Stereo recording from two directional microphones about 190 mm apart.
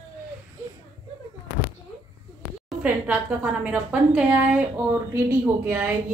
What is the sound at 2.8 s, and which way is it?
Speech, 5° right (ahead or behind).